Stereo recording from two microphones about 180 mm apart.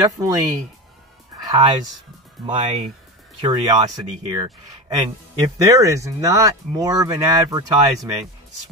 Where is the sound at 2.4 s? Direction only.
Centre (ahead or behind).